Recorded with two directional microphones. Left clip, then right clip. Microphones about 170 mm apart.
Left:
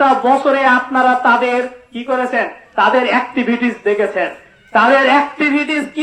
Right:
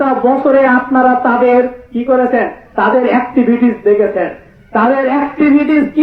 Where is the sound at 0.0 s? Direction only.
30° left (ahead or behind).